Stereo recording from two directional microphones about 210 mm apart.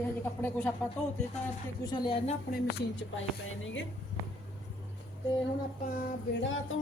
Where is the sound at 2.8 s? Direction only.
65° left (ahead or behind).